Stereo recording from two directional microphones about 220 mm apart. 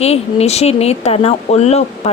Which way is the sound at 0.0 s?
30° left (ahead or behind).